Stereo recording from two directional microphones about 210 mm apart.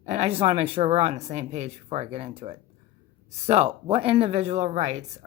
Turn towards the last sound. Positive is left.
turn(degrees=-35)  # may be behind; listen again after turning